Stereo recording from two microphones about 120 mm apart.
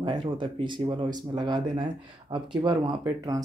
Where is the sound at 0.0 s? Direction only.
45° right (ahead or behind).